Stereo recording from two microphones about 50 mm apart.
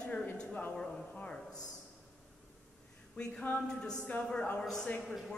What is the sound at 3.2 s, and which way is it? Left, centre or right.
Speech, left.